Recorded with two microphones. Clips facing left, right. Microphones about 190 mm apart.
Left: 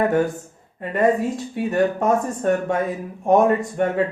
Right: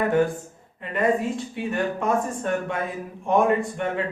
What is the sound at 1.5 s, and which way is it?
Speech, 40° left (ahead or behind).